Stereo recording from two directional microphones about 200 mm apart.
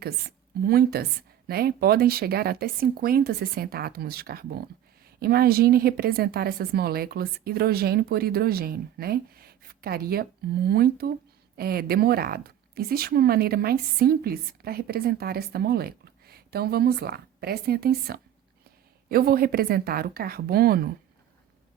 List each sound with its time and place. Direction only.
0.0 s a woman's voice: 50° right (ahead or behind)